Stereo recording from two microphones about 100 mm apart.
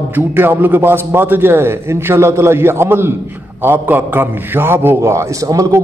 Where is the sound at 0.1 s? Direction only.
20° right (ahead or behind).